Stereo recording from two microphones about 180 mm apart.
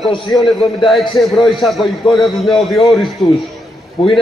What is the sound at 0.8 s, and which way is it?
A man's voice, centre (ahead or behind).